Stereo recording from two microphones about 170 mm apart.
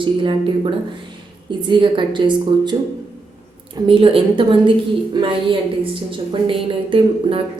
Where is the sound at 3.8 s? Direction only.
30° right (ahead or behind).